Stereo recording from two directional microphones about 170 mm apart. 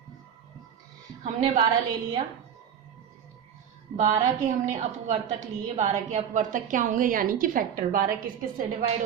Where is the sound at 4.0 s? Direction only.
45° right (ahead or behind).